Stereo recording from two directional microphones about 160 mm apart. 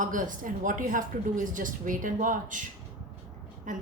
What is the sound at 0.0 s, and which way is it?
A woman's voice, 55° right (ahead or behind).